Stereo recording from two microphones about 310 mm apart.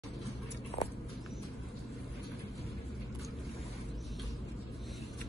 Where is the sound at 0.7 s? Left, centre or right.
Centre.